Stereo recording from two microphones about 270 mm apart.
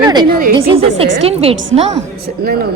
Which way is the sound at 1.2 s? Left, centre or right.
Right.